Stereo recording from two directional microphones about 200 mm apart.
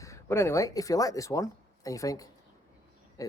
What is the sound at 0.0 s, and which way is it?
Speech, 15° left (ahead or behind).